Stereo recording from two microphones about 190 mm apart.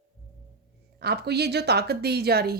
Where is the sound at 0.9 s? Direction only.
60° right (ahead or behind).